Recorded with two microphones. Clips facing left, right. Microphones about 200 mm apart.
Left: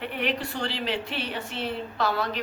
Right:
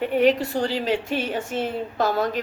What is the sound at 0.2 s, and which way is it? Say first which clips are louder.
A woman's voice: right 10 dB; 45° right (ahead or behind).